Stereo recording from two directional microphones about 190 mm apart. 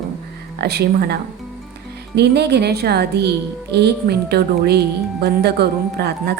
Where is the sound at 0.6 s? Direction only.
55° right (ahead or behind).